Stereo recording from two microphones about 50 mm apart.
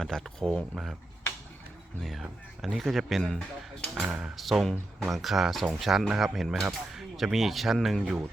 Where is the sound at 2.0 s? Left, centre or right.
Centre.